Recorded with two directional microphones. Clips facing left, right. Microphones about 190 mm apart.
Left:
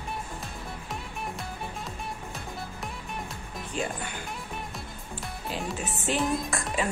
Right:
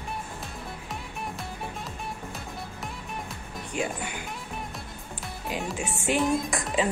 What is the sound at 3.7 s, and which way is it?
Music, 10° right (ahead or behind).